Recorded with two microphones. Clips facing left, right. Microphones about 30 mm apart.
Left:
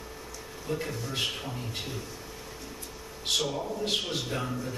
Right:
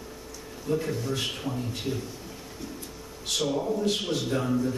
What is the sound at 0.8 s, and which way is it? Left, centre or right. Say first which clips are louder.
Speech: right 2 dB; centre.